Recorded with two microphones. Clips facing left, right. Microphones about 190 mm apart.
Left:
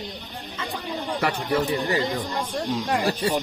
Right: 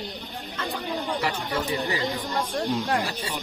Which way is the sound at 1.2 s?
55° left (ahead or behind).